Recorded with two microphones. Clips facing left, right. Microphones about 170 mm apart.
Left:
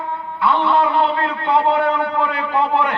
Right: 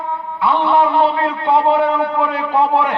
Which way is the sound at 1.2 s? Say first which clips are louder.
Right 2 dB; 65° right (ahead or behind).